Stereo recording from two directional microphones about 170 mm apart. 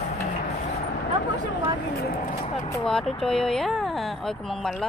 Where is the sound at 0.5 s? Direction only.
45° left (ahead or behind).